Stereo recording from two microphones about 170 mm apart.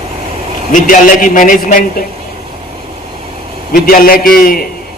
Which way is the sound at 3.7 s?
60° left (ahead or behind).